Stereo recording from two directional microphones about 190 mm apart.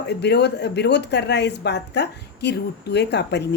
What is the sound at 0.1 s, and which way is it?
Speech, 60° left (ahead or behind).